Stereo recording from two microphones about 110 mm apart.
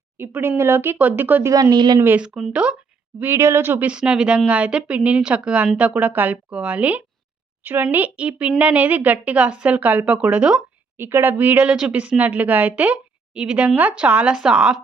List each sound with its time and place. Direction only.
0.2 s speech: 20° right (ahead or behind)
1.7 s speech: 40° right (ahead or behind)
2.0 s speech: 20° right (ahead or behind)
2.2 s speech: 5° right (ahead or behind)
3.2 s speech: 20° right (ahead or behind)